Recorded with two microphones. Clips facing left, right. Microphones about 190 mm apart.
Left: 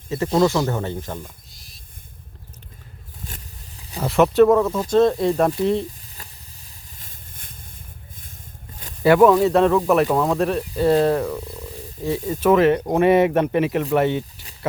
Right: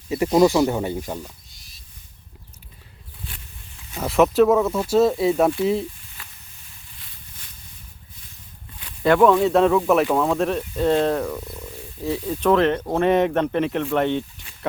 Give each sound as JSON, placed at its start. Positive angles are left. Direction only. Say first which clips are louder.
{"t": 0.1, "sound": "speech", "louder": "right 2 dB", "side_deg": -15}
{"t": 1.2, "sound": "a sound", "louder": "right 1 dB", "side_deg": 0}
{"t": 3.2, "sound": "wild animals", "louder": "left 2 dB", "side_deg": 40}
{"t": 4.0, "sound": "speech", "louder": "left 2 dB", "side_deg": 0}
{"t": 6.2, "sound": "vehicle", "louder": "left 2 dB", "side_deg": 40}
{"t": 9.0, "sound": "speech", "louder": "left 2 dB", "side_deg": 5}